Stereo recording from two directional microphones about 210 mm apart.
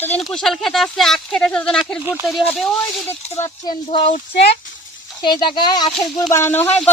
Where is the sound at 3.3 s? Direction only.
15° left (ahead or behind); by 4.5 s 35° left (ahead or behind).